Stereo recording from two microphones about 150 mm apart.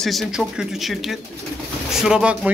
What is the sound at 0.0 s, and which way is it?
Speech, centre (ahead or behind).